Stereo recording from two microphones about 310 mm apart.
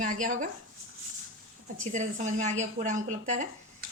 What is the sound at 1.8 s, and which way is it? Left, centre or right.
Speech, right.